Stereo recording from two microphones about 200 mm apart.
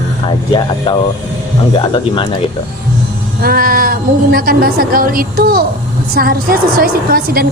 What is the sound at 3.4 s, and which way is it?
A woman's voice, 45° right (ahead or behind).